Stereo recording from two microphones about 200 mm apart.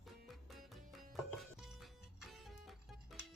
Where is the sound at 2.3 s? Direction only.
Centre (ahead or behind).